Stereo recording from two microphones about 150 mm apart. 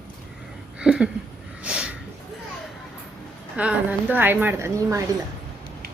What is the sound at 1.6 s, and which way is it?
Snort, 5° right (ahead or behind).